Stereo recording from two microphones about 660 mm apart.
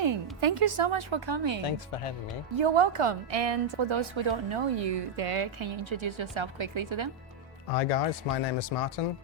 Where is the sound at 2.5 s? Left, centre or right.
Right.